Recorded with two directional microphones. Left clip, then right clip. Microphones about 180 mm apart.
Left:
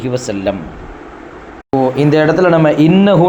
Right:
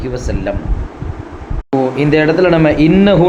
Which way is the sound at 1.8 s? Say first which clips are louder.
Left 1 dB; 30° left (ahead or behind).